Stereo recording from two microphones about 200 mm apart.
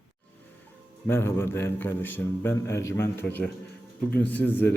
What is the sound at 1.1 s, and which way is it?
A man's voice, 10° left (ahead or behind).